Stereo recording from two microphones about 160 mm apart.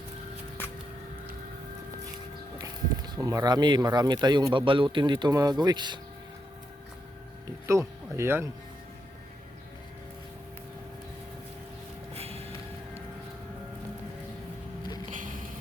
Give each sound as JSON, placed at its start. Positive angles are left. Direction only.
{"t": 3.2, "sound": "speech", "side_deg": -20}
{"t": 7.4, "sound": "music", "side_deg": -20}
{"t": 12.1, "sound": "snort", "side_deg": -40}
{"t": 15.1, "sound": "a sound", "side_deg": -55}